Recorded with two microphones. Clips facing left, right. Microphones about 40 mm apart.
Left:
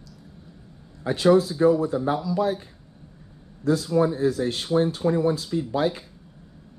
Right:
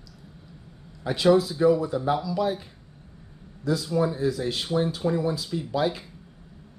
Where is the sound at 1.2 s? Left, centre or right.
Left.